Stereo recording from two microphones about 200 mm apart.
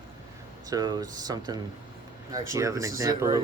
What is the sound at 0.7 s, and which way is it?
Speech, 20° right (ahead or behind).